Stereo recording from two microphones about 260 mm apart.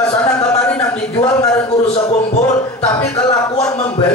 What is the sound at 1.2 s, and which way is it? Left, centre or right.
Speech, centre.